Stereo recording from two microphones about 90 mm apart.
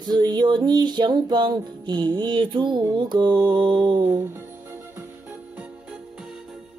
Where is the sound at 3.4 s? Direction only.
65° right (ahead or behind).